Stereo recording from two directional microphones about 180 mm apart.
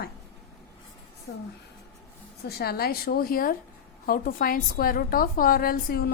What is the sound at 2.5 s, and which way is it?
A woman's voice, 60° left (ahead or behind).